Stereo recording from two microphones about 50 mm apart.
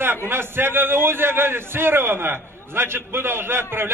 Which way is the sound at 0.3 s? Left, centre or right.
Right.